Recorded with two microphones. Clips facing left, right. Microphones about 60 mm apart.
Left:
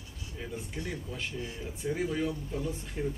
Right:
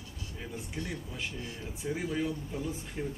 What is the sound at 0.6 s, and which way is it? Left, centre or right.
Speech, centre.